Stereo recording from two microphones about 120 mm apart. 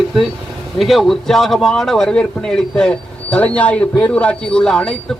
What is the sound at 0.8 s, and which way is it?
Speech, centre (ahead or behind).